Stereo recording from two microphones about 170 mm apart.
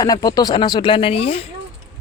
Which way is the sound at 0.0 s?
20° left (ahead or behind).